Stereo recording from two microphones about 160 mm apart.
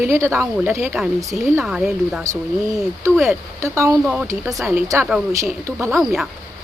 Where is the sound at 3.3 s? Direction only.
15° right (ahead or behind).